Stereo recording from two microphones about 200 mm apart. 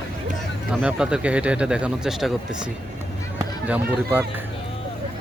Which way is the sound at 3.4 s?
10° right (ahead or behind).